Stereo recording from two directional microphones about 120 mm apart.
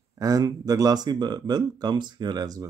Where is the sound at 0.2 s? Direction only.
30° right (ahead or behind).